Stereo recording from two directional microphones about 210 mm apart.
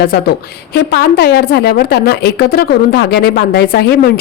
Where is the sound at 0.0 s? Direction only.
50° left (ahead or behind).